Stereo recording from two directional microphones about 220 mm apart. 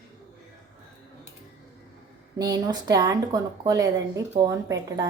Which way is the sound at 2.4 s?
15° right (ahead or behind).